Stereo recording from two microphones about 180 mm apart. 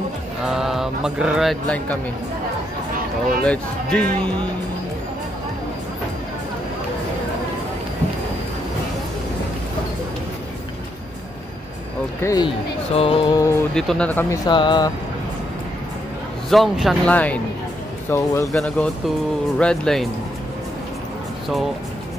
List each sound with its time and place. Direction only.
0.4 s speech: centre (ahead or behind)
3.4 s speech: 5° left (ahead or behind)
12.2 s speech: 20° left (ahead or behind)
12.4 s speech: 30° left (ahead or behind)
13.7 s speech: 5° left (ahead or behind); by 14.9 s 25° left (ahead or behind)
16.4 s speech: centre (ahead or behind)
18.5 s speech: centre (ahead or behind)